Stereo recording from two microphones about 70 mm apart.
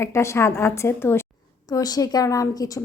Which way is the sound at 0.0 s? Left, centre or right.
Left.